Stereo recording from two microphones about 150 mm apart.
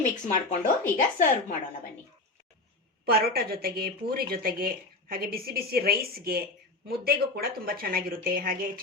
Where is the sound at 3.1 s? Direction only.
90° right.